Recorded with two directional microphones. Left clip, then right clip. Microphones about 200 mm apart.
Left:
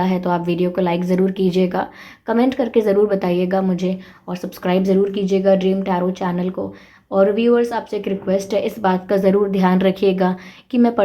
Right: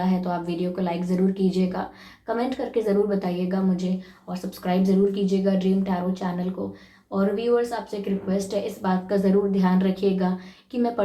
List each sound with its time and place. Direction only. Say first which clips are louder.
0.0 s speech: left 7 dB; 50° left (ahead or behind)